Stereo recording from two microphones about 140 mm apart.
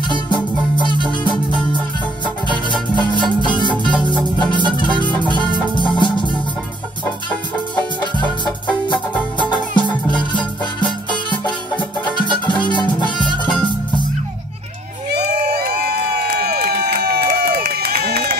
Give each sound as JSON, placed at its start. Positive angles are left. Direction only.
{"t": 0.1, "sound": "music", "side_deg": 35}
{"t": 2.4, "sound": "music", "side_deg": 35}
{"t": 8.8, "sound": "music", "side_deg": 35}
{"t": 15.2, "sound": "crowd", "side_deg": -90}